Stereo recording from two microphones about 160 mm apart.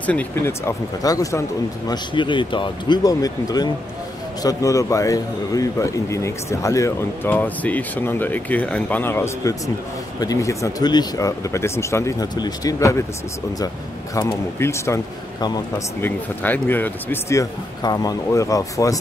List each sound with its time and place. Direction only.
0.0 s a man's voice: 10° left (ahead or behind)
14.1 s speech: 20° left (ahead or behind)
16.0 s speech: 10° left (ahead or behind)